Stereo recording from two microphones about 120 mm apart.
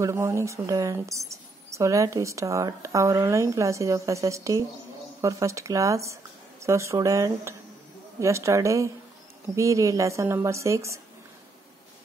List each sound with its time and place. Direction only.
0.0 s speech: 20° right (ahead or behind)